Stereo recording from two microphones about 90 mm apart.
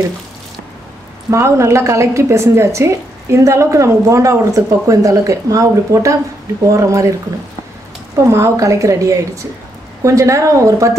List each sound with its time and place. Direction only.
1.3 s a woman's voice: 35° right (ahead or behind)
8.3 s a woman's voice: 35° right (ahead or behind)